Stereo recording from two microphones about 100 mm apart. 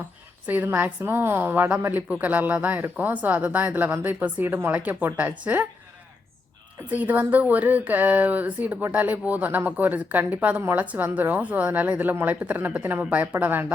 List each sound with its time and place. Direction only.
0.4 s a woman's voice: 20° right (ahead or behind)
6.9 s a woman's voice: 15° right (ahead or behind)